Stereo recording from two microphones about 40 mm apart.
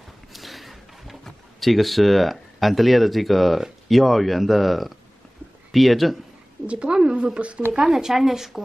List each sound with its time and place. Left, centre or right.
0.3 s a sound: centre
1.2 s speech: centre
6.6 s speech: right
7.9 s speech: centre